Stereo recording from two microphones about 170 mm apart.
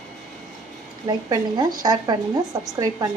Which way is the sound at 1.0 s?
25° right (ahead or behind).